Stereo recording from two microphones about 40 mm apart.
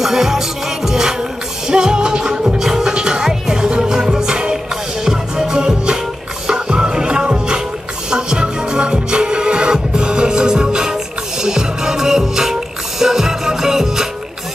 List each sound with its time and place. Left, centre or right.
0.0 s music: centre